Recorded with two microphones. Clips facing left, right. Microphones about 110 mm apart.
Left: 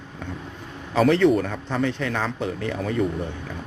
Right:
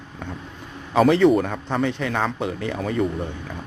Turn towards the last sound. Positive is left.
turn(degrees=0)  # may be behind; listen again after turning